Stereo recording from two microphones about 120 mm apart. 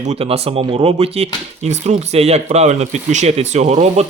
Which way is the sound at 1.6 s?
70° right (ahead or behind).